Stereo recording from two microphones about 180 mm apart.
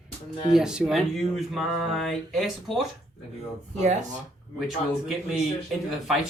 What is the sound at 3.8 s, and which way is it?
Speech, 40° right (ahead or behind).